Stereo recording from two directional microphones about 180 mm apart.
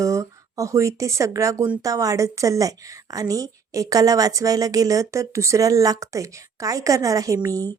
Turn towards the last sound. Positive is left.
turn(degrees=-20)  # may be behind; listen again after turning